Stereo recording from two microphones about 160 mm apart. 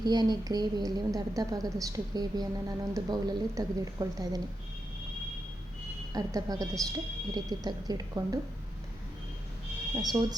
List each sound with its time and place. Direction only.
0.0 s a woman's voice: 25° right (ahead or behind)
6.1 s a woman's voice: 20° right (ahead or behind)
9.9 s a woman's voice: 25° right (ahead or behind)